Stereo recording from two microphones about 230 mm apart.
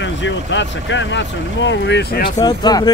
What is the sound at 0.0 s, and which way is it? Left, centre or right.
Speech, left.